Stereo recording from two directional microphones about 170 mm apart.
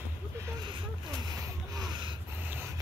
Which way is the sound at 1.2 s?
25° right (ahead or behind).